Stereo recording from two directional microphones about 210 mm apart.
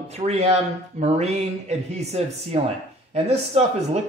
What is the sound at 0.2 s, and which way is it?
Speech, 30° right (ahead or behind).